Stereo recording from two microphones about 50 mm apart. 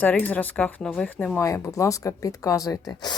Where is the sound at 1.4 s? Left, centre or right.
Left.